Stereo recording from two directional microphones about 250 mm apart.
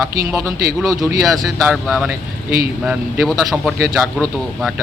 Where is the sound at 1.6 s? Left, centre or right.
Centre.